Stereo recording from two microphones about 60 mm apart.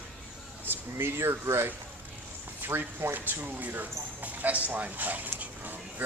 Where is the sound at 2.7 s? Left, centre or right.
Right.